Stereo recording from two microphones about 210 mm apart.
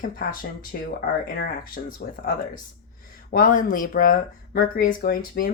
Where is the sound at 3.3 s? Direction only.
40° left (ahead or behind).